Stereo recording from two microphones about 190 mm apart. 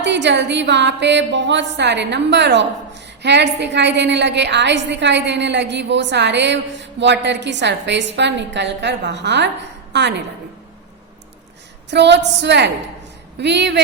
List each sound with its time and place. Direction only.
0.0 s a woman's voice: 65° right (ahead or behind)
11.9 s a woman's voice: 65° right (ahead or behind)